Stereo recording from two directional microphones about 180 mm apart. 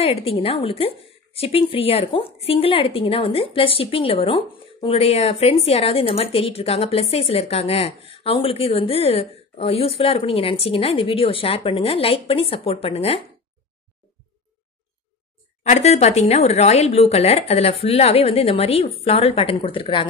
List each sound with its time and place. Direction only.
0.0 s a woman's voice: 35° left (ahead or behind)
15.6 s a woman's voice: 40° left (ahead or behind)